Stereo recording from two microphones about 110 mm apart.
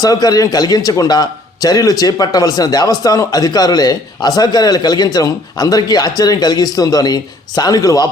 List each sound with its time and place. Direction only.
0.0 s a man's voice: 35° left (ahead or behind)